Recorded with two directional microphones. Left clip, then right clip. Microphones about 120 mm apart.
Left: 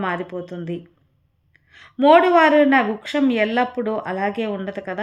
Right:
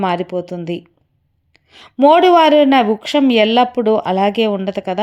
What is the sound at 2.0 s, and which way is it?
A woman's voice, 45° right (ahead or behind).